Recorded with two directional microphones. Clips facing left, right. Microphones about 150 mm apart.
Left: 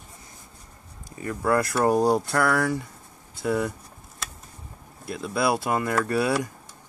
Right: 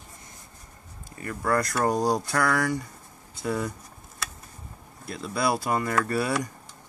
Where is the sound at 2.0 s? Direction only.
25° left (ahead or behind).